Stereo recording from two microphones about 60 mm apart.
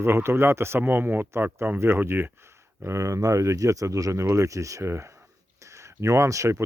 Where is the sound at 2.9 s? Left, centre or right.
Right.